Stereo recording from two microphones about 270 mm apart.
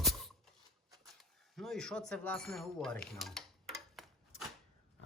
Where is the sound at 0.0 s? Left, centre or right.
Centre.